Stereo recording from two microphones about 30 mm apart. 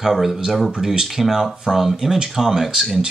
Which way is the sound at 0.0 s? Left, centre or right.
Centre.